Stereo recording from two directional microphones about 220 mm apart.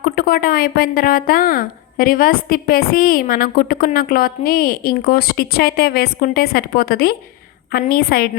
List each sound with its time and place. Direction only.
0.0 s a woman's voice: 40° left (ahead or behind)